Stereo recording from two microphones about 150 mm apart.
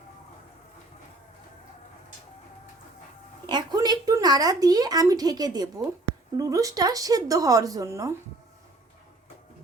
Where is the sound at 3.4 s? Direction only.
30° right (ahead or behind).